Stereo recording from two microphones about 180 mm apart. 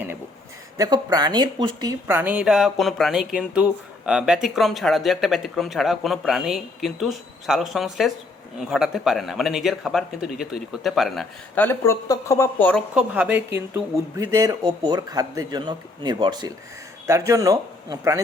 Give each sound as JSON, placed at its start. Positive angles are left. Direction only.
{"t": 0.8, "sound": "speech", "side_deg": -20}
{"t": 12.9, "sound": "speech", "side_deg": -5}